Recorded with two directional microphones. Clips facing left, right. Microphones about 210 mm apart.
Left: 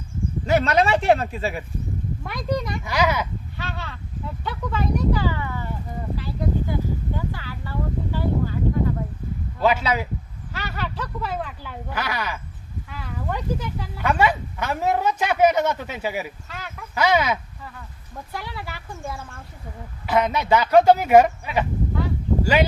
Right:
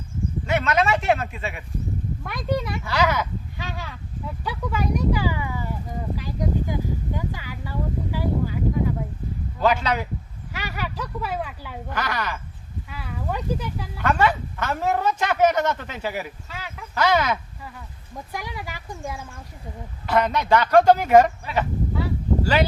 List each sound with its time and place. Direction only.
0.4 s speech: 35° left (ahead or behind)
2.2 s speech: centre (ahead or behind)
2.8 s speech: 10° left (ahead or behind)
3.6 s speech: 10° right (ahead or behind)
9.6 s speech: 5° left (ahead or behind)
10.5 s a sound: 10° right (ahead or behind)
11.9 s speech: 5° left (ahead or behind)
12.9 s speech: 10° right (ahead or behind)
14.0 s speech: 10° left (ahead or behind)
16.5 s speech: 10° right (ahead or behind)
16.9 s speech: 10° left (ahead or behind)
18.3 s speech: 15° right (ahead or behind)
20.1 s speech: 5° left (ahead or behind)